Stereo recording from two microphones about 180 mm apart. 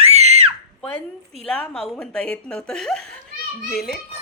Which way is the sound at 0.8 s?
10° left (ahead or behind).